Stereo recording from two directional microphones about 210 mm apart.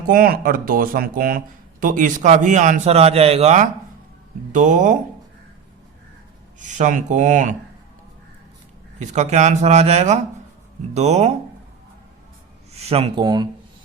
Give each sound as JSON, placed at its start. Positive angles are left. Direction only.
{"t": 0.1, "sound": "a man's voice", "side_deg": -45}
{"t": 6.6, "sound": "a man's voice", "side_deg": -35}
{"t": 9.0, "sound": "a man's voice", "side_deg": -35}
{"t": 12.7, "sound": "speech", "side_deg": -30}